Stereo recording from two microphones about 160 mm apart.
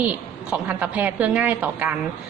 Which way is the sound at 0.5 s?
10° right (ahead or behind).